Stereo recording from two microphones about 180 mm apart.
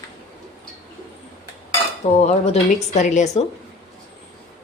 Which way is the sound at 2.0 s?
35° left (ahead or behind).